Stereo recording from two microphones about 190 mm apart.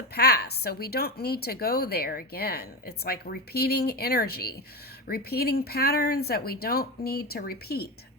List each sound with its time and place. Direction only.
0.1 s a woman's voice: 55° left (ahead or behind)